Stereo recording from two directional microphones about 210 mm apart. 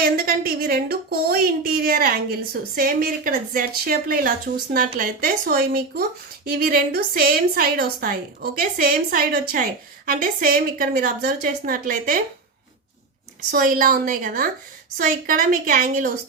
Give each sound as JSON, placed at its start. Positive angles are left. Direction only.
{"t": 0.0, "sound": "a woman's voice", "side_deg": -45}
{"t": 13.5, "sound": "a woman's voice", "side_deg": -40}